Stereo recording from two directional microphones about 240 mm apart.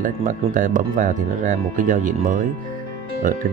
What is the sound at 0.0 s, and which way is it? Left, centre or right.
Speech, right.